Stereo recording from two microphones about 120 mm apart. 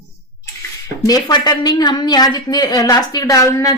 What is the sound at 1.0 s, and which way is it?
A woman's voice, 35° left (ahead or behind).